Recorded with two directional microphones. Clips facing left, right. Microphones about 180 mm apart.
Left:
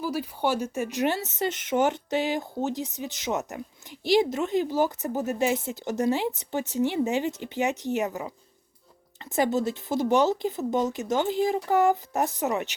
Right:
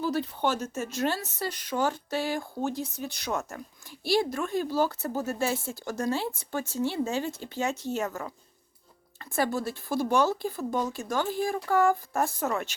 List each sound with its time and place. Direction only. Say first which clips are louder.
0.0 s speech: even; 10° left (ahead or behind)